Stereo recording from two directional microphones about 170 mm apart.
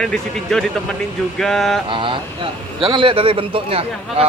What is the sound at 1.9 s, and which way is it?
Speech, 30° right (ahead or behind).